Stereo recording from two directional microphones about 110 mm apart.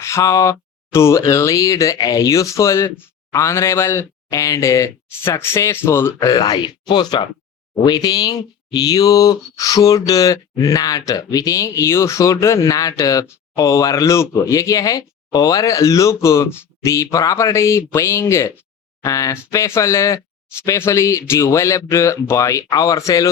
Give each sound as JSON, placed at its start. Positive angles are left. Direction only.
{"t": 0.0, "sound": "speech", "side_deg": 25}
{"t": 6.1, "sound": "speech", "side_deg": 35}